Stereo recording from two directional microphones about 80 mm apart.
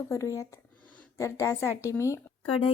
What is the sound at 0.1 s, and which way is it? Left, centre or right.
Speech, left.